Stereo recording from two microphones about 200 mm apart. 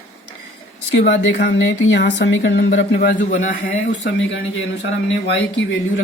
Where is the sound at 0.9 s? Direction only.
60° left (ahead or behind).